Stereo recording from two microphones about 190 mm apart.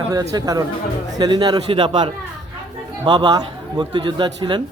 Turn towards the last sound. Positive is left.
turn(degrees=-25)  # may be behind; listen again after turning